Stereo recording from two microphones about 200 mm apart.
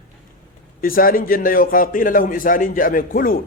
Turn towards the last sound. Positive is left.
turn(degrees=45)  # may be behind; listen again after turning